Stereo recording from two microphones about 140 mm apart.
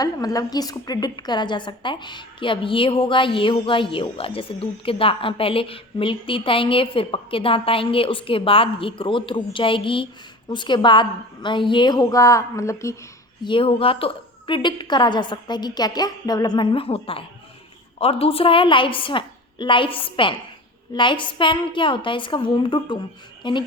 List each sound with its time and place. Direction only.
0.0 s a woman's voice: 25° left (ahead or behind)
13.4 s a woman's voice: 40° left (ahead or behind)